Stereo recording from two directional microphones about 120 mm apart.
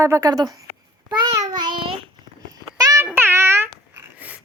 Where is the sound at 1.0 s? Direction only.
35° right (ahead or behind).